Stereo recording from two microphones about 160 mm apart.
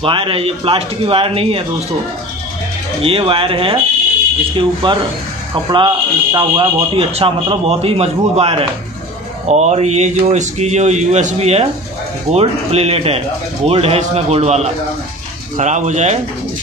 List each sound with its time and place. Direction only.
0.0 s speech: 35° right (ahead or behind)
3.0 s speech: 35° right (ahead or behind)
4.8 s speech: 30° right (ahead or behind); by 16.2 s 45° right (ahead or behind)